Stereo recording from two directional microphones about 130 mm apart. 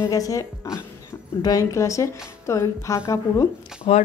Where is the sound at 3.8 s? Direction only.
45° left (ahead or behind).